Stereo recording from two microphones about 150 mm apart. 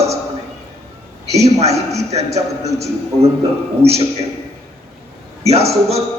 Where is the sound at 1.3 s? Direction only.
45° right (ahead or behind).